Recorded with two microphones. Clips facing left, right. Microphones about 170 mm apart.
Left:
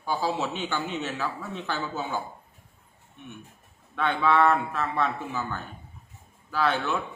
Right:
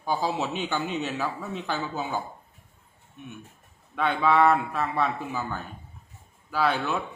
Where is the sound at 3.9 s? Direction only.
15° right (ahead or behind).